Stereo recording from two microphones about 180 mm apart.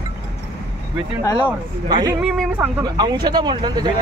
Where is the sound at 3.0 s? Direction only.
25° right (ahead or behind).